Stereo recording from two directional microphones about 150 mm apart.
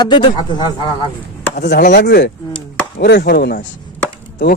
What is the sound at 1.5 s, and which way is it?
Chopping, 80° left.